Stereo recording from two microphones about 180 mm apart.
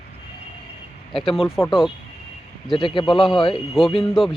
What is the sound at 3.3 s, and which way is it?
Speech, 30° left (ahead or behind).